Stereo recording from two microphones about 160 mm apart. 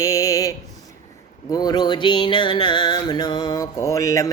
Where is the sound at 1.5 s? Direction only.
25° left (ahead or behind).